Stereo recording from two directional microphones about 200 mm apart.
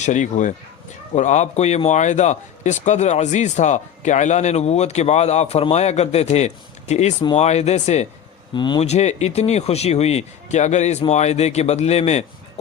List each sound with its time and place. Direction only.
0.0 s speech: 35° left (ahead or behind)
8.5 s speech: 25° left (ahead or behind)